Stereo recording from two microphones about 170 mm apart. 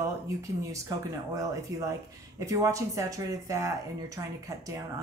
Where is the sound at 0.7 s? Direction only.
20° right (ahead or behind).